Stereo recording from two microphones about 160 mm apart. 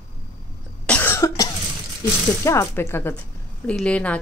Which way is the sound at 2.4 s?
20° left (ahead or behind).